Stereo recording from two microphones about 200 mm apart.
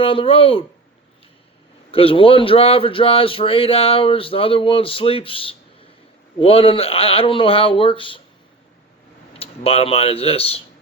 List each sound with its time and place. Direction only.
0.0 s speech: 25° left (ahead or behind)
1.9 s speech: 30° left (ahead or behind)
9.4 s speech: 30° left (ahead or behind)